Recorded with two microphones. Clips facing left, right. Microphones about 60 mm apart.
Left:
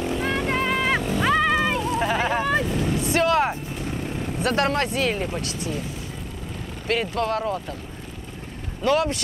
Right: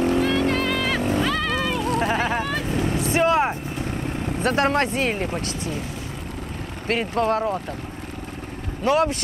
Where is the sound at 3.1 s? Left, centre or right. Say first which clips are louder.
Right 1 dB; centre.